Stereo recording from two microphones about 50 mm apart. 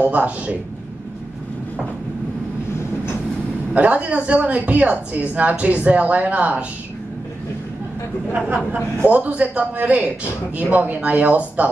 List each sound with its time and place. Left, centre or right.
0.0 s speech: right
3.7 s speech: right
9.0 s speech: right